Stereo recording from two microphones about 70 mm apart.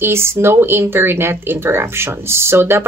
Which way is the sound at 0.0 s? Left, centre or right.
Right.